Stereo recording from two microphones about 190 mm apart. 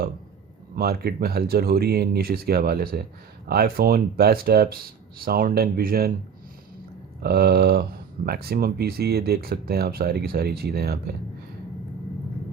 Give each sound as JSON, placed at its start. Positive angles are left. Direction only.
{"t": 0.8, "sound": "speech", "side_deg": -55}
{"t": 7.2, "sound": "speech", "side_deg": -55}